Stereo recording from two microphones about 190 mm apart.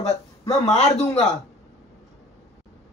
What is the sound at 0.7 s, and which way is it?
Speech, 35° left (ahead or behind).